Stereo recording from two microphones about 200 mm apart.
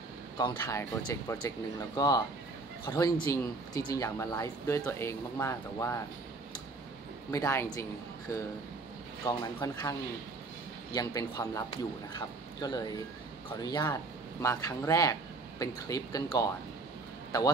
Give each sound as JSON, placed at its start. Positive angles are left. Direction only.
{"t": 0.4, "sound": "speech", "side_deg": 15}
{"t": 7.2, "sound": "speech", "side_deg": 15}
{"t": 9.2, "sound": "speech", "side_deg": 15}